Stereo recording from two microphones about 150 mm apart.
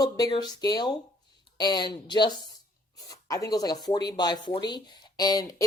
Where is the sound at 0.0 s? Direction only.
25° left (ahead or behind).